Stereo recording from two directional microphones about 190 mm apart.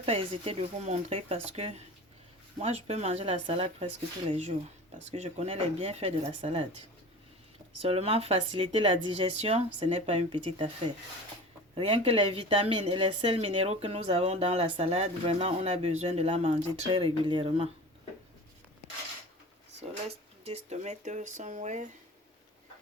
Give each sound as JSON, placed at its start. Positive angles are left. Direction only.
{"t": 0.0, "sound": "speech", "side_deg": -30}
{"t": 7.8, "sound": "speech", "side_deg": -30}
{"t": 11.7, "sound": "speech", "side_deg": -30}
{"t": 16.9, "sound": "speech", "side_deg": -25}
{"t": 20.1, "sound": "speech", "side_deg": -35}